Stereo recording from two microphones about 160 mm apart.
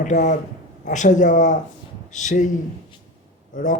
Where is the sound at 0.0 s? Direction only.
50° left (ahead or behind).